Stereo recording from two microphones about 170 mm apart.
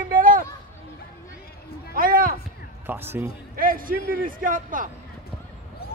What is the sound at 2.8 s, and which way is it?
Speech, 10° right (ahead or behind).